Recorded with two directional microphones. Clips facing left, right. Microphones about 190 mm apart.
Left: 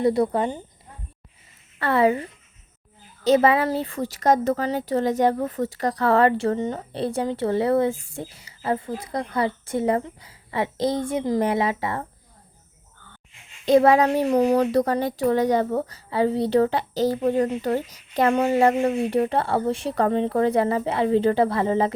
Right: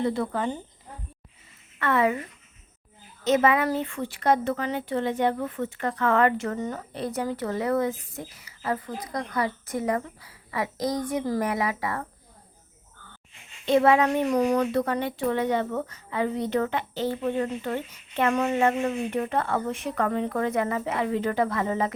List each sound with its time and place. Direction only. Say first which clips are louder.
0.2 s speech: left 7 dB; 20° left (ahead or behind)
1.8 s speech: left 4 dB; 30° left (ahead or behind)
13.7 s speech: left 4 dB; 40° left (ahead or behind)